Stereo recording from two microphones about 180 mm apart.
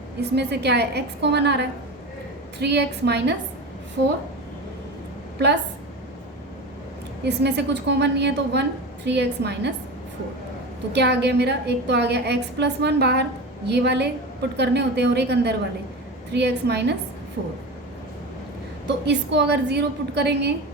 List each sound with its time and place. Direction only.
0.2 s a woman's voice: 70° right (ahead or behind)
7.3 s a woman's voice: 70° right (ahead or behind)
10.9 s a woman's voice: 70° right (ahead or behind)
18.9 s a woman's voice: 75° right (ahead or behind)